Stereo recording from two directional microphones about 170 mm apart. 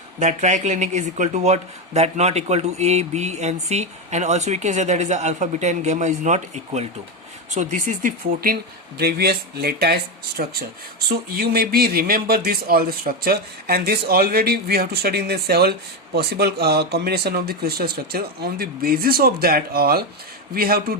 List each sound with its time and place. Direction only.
0.2 s speech: 45° right (ahead or behind)
9.0 s speech: 65° right (ahead or behind)